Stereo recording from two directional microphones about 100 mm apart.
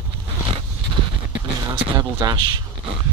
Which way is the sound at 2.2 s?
40° right (ahead or behind).